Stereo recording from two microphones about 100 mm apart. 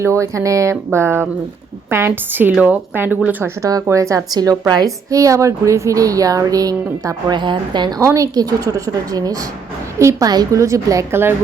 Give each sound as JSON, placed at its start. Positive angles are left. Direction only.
{"t": 0.0, "sound": "speech", "side_deg": -30}
{"t": 3.6, "sound": "a woman's voice", "side_deg": -35}
{"t": 7.3, "sound": "a woman's voice", "side_deg": -50}
{"t": 8.0, "sound": "a woman's voice", "side_deg": -30}